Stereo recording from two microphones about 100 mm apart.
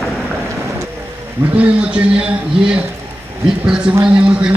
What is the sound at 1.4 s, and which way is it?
Speech, 15° right (ahead or behind).